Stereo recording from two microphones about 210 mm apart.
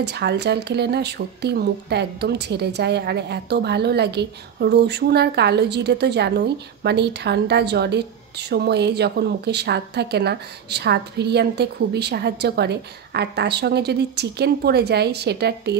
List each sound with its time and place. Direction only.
0.0 s speech: 50° right (ahead or behind)